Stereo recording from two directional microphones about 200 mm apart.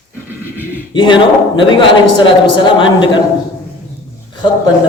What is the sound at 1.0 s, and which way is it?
A man's voice, 25° left (ahead or behind).